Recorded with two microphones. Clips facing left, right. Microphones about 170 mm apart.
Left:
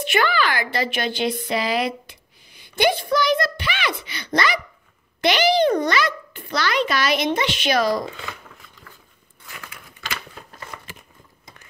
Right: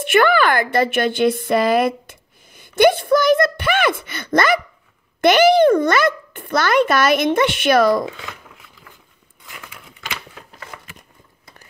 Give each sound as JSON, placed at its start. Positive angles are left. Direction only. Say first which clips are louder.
{"t": 0.0, "sound": "a woman's voice", "louder": "right 6 dB", "side_deg": -55}
{"t": 8.2, "sound": "a sound", "louder": "even", "side_deg": -5}
{"t": 9.6, "sound": "crumpling", "louder": "right 1 dB", "side_deg": -5}